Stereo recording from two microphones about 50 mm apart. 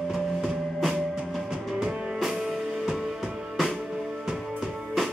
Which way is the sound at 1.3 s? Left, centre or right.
Centre.